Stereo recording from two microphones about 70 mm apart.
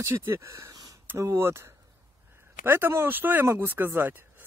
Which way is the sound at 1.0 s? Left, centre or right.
Right.